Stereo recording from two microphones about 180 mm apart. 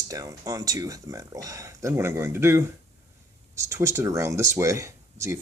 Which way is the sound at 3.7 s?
15° right (ahead or behind).